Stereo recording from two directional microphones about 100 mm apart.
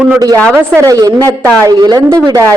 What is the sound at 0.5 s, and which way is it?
Speech, 25° right (ahead or behind).